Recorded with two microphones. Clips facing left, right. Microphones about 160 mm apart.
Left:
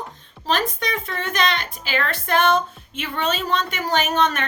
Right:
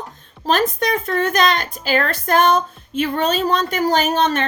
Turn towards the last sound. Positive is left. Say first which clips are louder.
# right 3 dB
turn(degrees=-30)  # may be behind; listen again after turning